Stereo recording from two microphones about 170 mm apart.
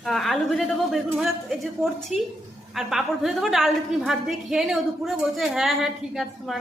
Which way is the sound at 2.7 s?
Centre (ahead or behind).